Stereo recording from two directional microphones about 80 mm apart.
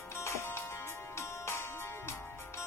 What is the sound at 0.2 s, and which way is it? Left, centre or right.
Music, left.